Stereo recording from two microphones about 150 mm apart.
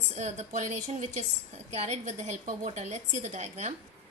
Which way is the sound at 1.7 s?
50° right (ahead or behind).